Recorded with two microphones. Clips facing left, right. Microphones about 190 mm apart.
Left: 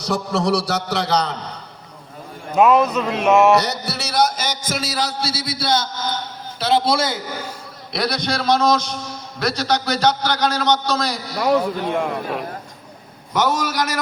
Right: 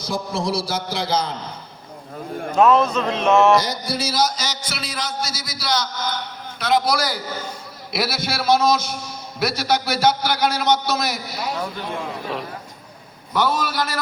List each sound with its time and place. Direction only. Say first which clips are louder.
0.0 s a man's voice: left 4 dB; 70° left (ahead or behind)
2.6 s speech: left 1 dB; 15° left (ahead or behind)
3.6 s a man's voice: even; 70° left (ahead or behind); by 7.2 s 25° left (ahead or behind)
7.9 s a man's voice: left 2 dB; 5° right (ahead or behind)
11.9 s a man's voice: left 5 dB; 60° left (ahead or behind)
13.3 s speech: left 1 dB; 20° left (ahead or behind)